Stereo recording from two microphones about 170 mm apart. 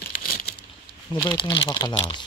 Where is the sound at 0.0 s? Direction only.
60° left (ahead or behind).